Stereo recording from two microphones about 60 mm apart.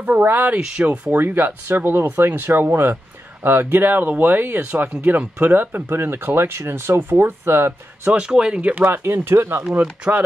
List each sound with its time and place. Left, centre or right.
0.0 s speech: right
0.6 s speech: centre
1.1 s speech: right
8.1 s speech: centre
8.6 s speech: right
8.9 s speech: right
10.1 s speech: right